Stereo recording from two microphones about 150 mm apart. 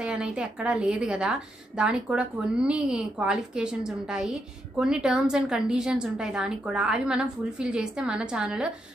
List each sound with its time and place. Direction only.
0.0 s a woman's voice: 5° right (ahead or behind)